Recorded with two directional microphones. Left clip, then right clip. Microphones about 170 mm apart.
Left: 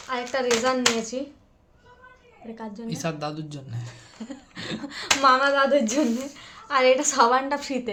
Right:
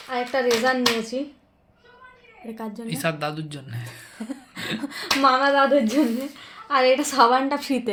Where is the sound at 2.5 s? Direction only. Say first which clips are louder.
Right 3 dB; 60° right (ahead or behind).